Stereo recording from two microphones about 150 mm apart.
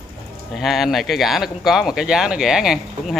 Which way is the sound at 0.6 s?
Centre (ahead or behind).